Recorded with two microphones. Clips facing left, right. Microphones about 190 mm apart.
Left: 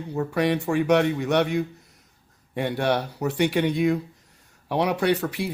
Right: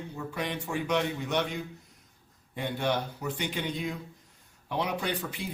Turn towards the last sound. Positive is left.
turn(degrees=70)  # may be behind; listen again after turning